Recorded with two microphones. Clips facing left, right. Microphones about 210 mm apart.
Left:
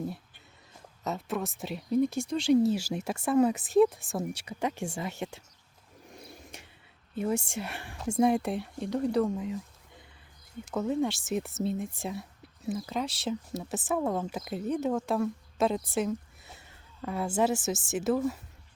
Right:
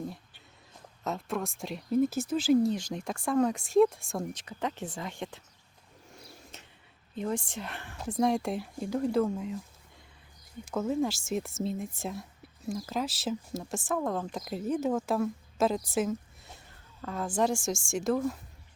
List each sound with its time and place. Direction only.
0.7 s speech: centre (ahead or behind)
6.1 s a sound: 15° left (ahead or behind)
7.2 s speech: 10° left (ahead or behind)